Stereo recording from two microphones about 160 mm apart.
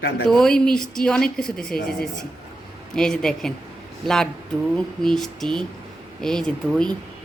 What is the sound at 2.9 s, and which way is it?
Speech, 5° left (ahead or behind).